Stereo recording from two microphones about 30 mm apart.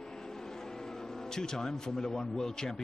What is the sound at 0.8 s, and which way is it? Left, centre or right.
Speech, centre.